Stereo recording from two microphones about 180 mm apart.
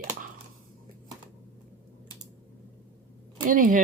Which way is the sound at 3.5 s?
50° right (ahead or behind).